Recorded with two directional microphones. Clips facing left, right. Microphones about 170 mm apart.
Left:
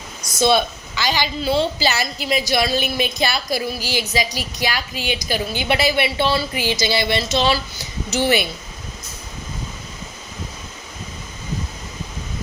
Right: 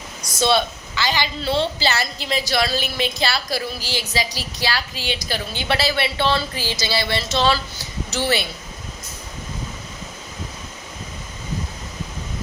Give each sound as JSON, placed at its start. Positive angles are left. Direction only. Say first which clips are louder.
{"t": 0.3, "sound": "a woman's voice", "louder": "left 2 dB", "side_deg": 15}